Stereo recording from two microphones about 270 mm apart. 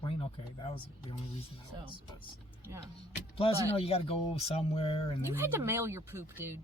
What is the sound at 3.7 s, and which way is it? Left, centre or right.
Speech, left.